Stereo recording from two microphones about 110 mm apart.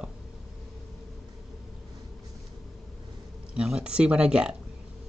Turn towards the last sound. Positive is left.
turn(degrees=-10)  # may be behind; listen again after turning